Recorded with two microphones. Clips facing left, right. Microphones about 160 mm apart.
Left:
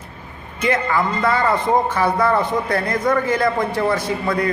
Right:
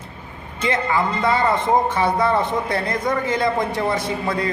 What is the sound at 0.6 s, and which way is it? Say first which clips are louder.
A man's voice: left 1 dB; 20° right (ahead or behind).